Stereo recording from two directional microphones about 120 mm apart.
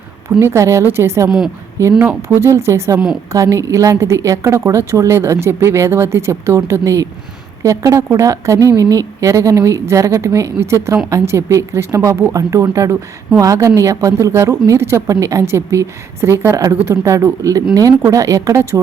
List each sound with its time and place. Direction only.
0.3 s speech: 25° right (ahead or behind)